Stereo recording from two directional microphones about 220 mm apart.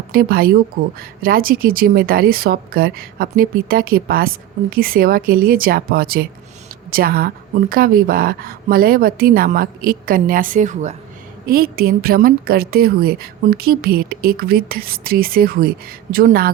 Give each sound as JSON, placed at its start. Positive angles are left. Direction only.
{"t": 0.1, "sound": "a woman's voice", "side_deg": -40}